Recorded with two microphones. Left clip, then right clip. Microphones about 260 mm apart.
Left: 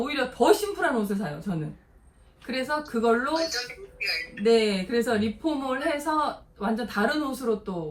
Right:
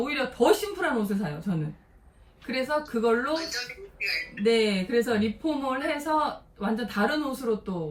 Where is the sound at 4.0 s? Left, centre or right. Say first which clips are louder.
Even; centre.